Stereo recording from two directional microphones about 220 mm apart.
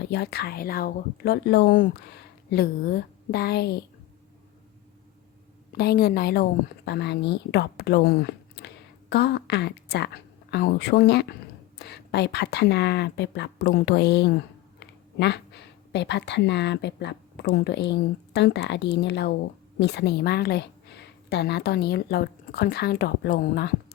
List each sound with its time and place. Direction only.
0.1 s a woman's voice: 45° left (ahead or behind)
5.7 s a woman's voice: 45° left (ahead or behind)